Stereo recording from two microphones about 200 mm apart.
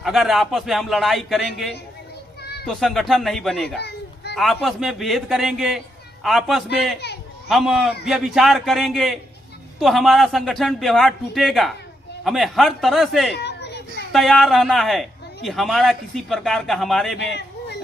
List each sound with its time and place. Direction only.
0.0 s a man's voice: centre (ahead or behind)
3.8 s children playing: 55° left (ahead or behind)
4.4 s a man's voice: centre (ahead or behind)
13.3 s children playing: 55° left (ahead or behind)
14.1 s a man's voice: centre (ahead or behind)